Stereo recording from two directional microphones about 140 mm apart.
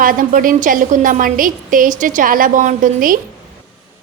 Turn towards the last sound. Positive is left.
turn(degrees=-75)  # may be behind; listen again after turning